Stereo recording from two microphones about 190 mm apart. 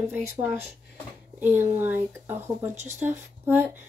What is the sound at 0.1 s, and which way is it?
Speech, 10° right (ahead or behind).